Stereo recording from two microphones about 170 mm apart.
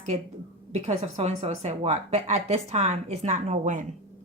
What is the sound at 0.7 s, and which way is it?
A woman's voice, 40° right (ahead or behind).